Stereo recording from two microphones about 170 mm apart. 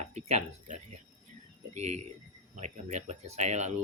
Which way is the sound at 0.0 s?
40° right (ahead or behind).